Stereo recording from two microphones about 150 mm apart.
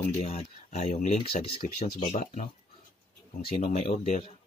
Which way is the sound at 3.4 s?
45° left (ahead or behind).